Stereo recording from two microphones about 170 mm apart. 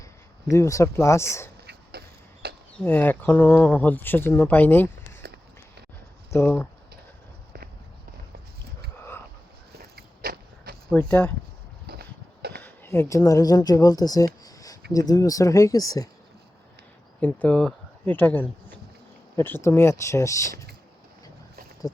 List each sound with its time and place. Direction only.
0.5 s speech: 15° left (ahead or behind)
1.6 s a sound: 70° right (ahead or behind)
2.8 s speech: 10° left (ahead or behind)
6.3 s speech: 10° left (ahead or behind)
9.7 s biting: 65° right (ahead or behind)
10.9 s speech: 10° left (ahead or behind)
11.9 s a sound: 70° right (ahead or behind)
12.6 s speech: 15° left (ahead or behind)
14.4 s a sound: 20° left (ahead or behind)
14.9 s speech: 20° left (ahead or behind)
17.2 s speech: 10° left (ahead or behind)